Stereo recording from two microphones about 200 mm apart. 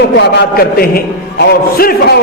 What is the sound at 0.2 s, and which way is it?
A man's voice, 55° left (ahead or behind).